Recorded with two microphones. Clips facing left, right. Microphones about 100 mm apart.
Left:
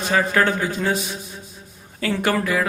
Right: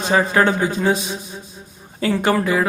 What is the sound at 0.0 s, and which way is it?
Speech, 25° right (ahead or behind).